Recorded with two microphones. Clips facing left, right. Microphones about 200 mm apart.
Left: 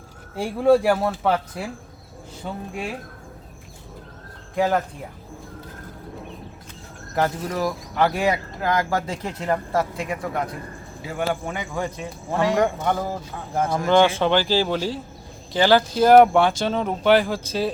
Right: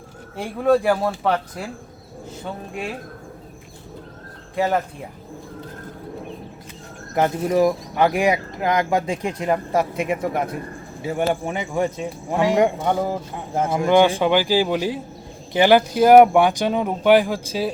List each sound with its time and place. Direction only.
0.6 s speech: 10° left (ahead or behind)
4.5 s speech: 5° right (ahead or behind)
7.1 s a man's voice: 20° right (ahead or behind)